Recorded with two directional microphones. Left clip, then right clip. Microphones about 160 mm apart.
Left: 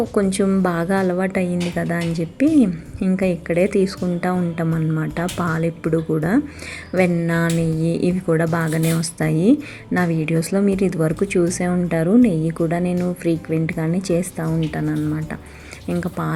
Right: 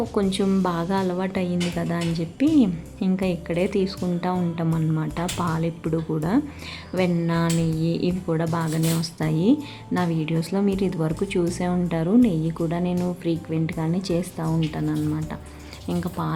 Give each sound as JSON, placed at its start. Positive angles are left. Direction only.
{"t": 0.1, "sound": "speech", "side_deg": 10}
{"t": 7.8, "sound": "speech", "side_deg": 55}
{"t": 8.0, "sound": "speech", "side_deg": 15}
{"t": 12.9, "sound": "speech", "side_deg": 0}
{"t": 13.2, "sound": "speech", "side_deg": 15}